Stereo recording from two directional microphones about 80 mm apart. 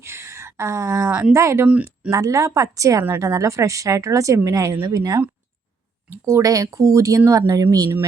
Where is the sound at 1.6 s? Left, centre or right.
Centre.